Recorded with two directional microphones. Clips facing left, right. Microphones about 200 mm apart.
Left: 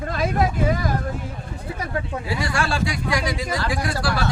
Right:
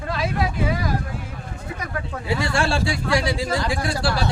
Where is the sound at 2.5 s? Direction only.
25° right (ahead or behind).